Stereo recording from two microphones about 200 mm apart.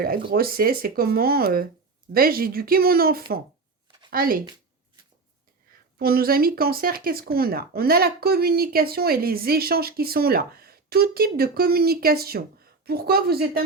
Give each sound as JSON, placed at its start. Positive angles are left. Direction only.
{"t": 0.3, "sound": "speech", "side_deg": -50}
{"t": 6.0, "sound": "speech", "side_deg": -50}